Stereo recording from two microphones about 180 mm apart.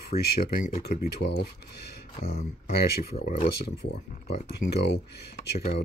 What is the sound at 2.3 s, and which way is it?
Speech, 55° left (ahead or behind).